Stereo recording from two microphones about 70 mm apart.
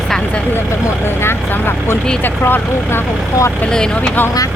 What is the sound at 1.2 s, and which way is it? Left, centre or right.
Vehicle, left.